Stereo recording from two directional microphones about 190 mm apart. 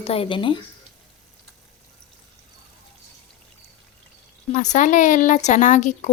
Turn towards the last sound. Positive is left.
turn(degrees=40)  # may be behind; listen again after turning